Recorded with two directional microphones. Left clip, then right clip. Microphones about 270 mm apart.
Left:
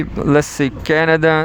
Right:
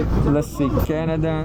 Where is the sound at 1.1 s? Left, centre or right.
Left.